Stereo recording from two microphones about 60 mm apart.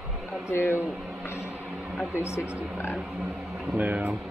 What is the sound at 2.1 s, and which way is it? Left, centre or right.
Speech, left.